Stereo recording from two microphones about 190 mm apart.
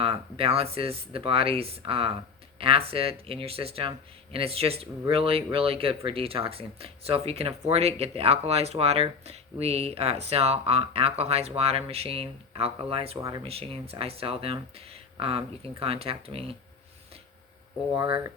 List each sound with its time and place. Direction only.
0.0 s speech: 30° right (ahead or behind)
13.2 s speech: 20° right (ahead or behind)
13.5 s speech: 30° right (ahead or behind)
17.9 s speech: 20° right (ahead or behind)